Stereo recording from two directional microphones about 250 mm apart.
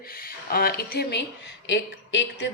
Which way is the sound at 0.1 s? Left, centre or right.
Left.